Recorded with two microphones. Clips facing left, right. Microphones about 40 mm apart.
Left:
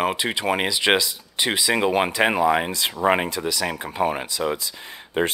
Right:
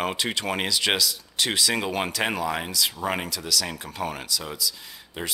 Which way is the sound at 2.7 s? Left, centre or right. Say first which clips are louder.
Left 6 dB; left.